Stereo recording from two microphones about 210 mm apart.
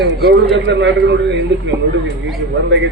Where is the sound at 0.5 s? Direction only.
60° right (ahead or behind).